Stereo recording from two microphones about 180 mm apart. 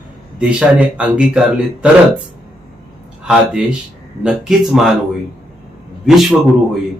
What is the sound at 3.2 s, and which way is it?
A man's voice, 5° right (ahead or behind).